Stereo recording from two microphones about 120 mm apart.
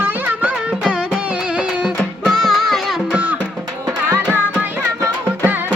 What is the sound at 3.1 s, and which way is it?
Music, 10° right (ahead or behind).